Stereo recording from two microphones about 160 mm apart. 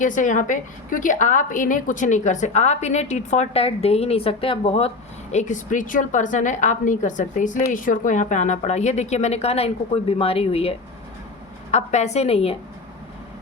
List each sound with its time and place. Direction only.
0.0 s a woman's voice: 50° left (ahead or behind); by 4.9 s 35° left (ahead or behind)
5.3 s a woman's voice: 50° left (ahead or behind)